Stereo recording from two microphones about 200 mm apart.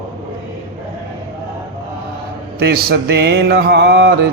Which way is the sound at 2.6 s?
50° right (ahead or behind).